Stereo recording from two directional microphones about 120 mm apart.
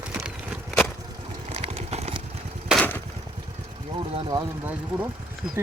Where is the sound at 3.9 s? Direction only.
45° right (ahead or behind).